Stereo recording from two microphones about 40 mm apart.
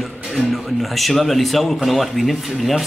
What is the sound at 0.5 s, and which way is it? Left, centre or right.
Speech, centre.